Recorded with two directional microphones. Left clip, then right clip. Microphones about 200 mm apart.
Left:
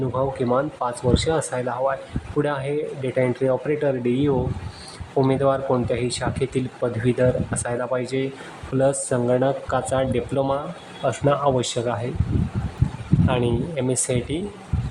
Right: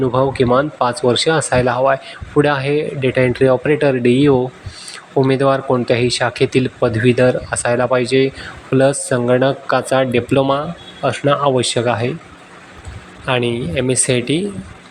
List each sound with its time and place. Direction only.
0.0 s speech: 20° right (ahead or behind)
13.2 s speech: 15° right (ahead or behind)